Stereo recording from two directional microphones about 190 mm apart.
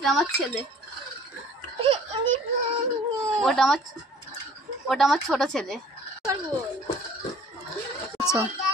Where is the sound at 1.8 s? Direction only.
30° right (ahead or behind).